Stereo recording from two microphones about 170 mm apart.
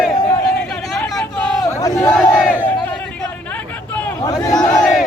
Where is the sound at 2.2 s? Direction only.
5° left (ahead or behind).